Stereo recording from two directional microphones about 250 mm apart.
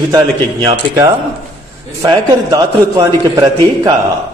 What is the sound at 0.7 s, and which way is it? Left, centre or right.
A man's voice, centre.